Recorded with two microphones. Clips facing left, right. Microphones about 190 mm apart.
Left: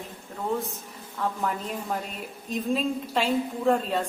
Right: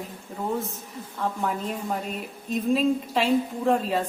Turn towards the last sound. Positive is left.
turn(degrees=0)  # may be behind; listen again after turning